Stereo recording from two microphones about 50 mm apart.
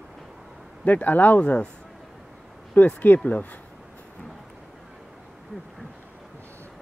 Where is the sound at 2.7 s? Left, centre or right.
Left.